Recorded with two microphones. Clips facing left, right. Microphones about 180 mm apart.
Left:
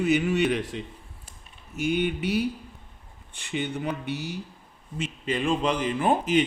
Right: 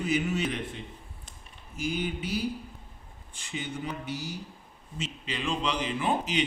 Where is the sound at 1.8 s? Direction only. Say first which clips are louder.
Left 6 dB; 65° left (ahead or behind).